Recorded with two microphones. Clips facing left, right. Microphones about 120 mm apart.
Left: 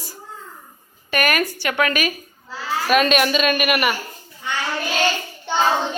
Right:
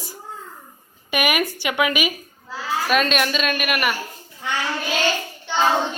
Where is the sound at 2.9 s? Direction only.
5° left (ahead or behind).